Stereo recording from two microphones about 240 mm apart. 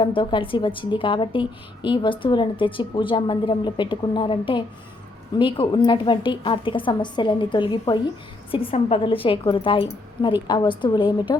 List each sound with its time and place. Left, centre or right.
0.0 s a woman's voice: left